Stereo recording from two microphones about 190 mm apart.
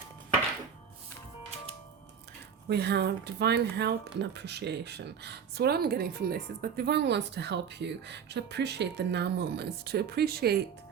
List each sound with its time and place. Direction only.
2.6 s speech: 60° right (ahead or behind)